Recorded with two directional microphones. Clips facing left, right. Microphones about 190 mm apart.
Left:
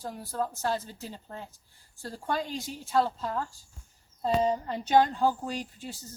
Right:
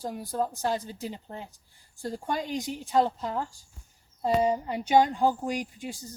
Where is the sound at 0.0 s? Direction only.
15° right (ahead or behind).